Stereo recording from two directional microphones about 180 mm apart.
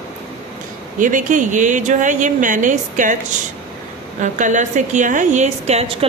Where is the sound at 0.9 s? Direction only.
45° right (ahead or behind).